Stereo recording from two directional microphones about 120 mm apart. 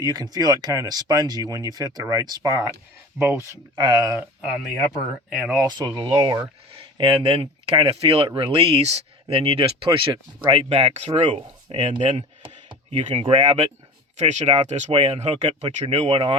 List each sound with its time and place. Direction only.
0.0 s speech: 35° right (ahead or behind)
3.8 s speech: 35° right (ahead or behind)
5.3 s speech: 10° right (ahead or behind)
5.6 s speech: 35° right (ahead or behind)
6.7 s speech: 50° right (ahead or behind); by 11.9 s 65° right (ahead or behind)
11.9 s speech: 40° right (ahead or behind)
14.2 s speech: 70° right (ahead or behind)
15.6 s speech: 45° right (ahead or behind)